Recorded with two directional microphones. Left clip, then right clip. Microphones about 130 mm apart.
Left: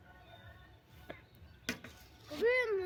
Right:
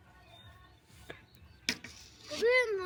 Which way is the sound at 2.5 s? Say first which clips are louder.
Right 4 dB; 25° right (ahead or behind).